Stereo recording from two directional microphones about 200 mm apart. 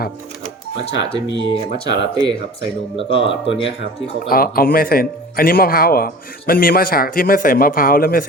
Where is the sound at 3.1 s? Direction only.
65° left (ahead or behind).